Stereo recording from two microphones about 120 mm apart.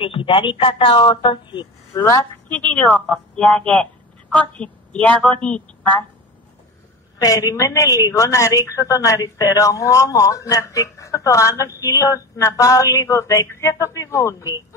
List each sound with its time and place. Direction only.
0.0 s a man's voice: 50° left (ahead or behind)
2.0 s a woman's voice: 25° left (ahead or behind)
2.4 s speech: 10° left (ahead or behind)
7.2 s a woman's voice: 30° left (ahead or behind)